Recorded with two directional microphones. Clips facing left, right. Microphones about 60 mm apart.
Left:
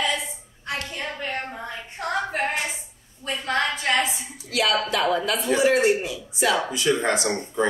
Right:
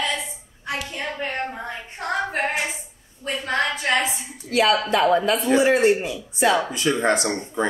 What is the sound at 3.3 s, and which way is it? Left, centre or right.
Speech, right.